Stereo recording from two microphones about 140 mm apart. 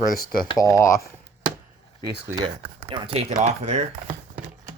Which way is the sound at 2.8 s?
40° right (ahead or behind).